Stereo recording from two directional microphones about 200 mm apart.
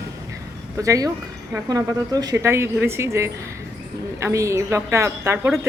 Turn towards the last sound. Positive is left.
turn(degrees=-15)  # may be behind; listen again after turning